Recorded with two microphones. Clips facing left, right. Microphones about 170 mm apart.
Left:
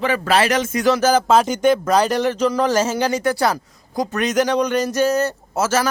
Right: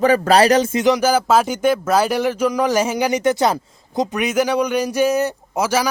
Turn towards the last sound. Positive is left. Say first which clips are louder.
# even
turn(degrees=-15)  # may be behind; listen again after turning